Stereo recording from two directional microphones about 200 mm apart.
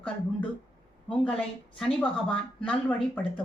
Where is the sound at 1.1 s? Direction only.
5° left (ahead or behind).